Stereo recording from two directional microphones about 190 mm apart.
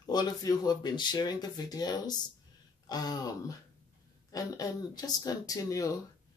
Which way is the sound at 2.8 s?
20° left (ahead or behind).